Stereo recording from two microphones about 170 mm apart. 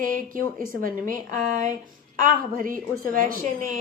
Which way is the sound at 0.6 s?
55° right (ahead or behind).